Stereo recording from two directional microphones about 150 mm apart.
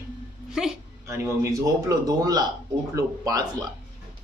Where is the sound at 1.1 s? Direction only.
20° right (ahead or behind).